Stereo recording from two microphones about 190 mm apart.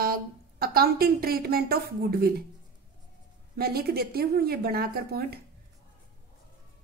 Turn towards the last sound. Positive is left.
turn(degrees=-55)  # may be behind; listen again after turning